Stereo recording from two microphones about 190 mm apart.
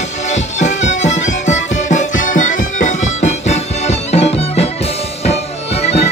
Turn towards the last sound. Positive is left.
turn(degrees=35)  # may be behind; listen again after turning